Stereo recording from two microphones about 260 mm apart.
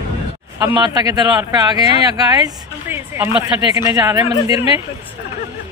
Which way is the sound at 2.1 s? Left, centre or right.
Centre.